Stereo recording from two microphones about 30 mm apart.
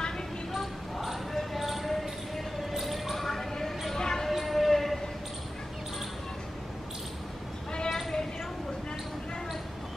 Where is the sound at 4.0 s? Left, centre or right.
Centre.